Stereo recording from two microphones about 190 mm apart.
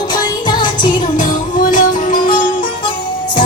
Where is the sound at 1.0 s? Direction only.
45° left (ahead or behind).